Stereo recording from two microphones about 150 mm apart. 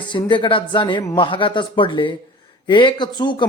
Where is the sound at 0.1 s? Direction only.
30° left (ahead or behind).